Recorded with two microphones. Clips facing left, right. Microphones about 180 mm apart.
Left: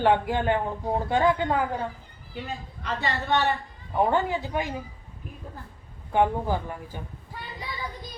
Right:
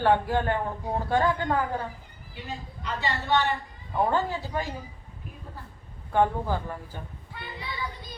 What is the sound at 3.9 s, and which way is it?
Speech, 15° left (ahead or behind).